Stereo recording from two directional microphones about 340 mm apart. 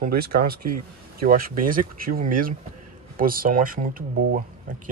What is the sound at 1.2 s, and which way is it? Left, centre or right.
Speech, right.